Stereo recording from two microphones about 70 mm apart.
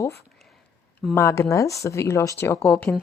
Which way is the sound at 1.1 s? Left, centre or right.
Left.